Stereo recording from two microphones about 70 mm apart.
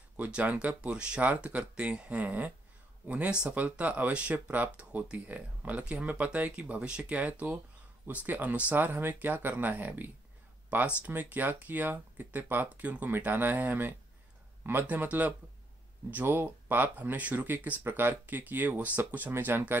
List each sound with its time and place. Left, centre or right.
0.2 s speech: right